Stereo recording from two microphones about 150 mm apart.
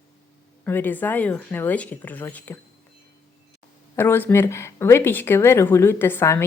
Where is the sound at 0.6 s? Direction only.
10° left (ahead or behind).